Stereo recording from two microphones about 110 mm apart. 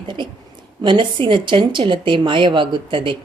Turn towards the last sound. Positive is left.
turn(degrees=-50)  # may be behind; listen again after turning